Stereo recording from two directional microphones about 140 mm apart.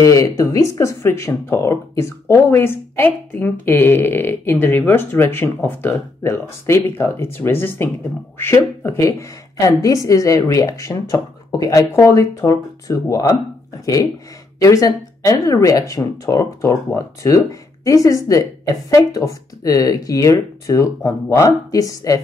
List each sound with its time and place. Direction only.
0.0 s speech: 25° left (ahead or behind)